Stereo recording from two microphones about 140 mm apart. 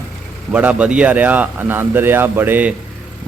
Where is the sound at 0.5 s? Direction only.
10° right (ahead or behind).